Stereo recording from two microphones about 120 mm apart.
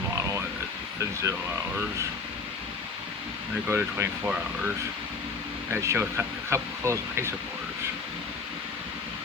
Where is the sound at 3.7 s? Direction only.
20° right (ahead or behind).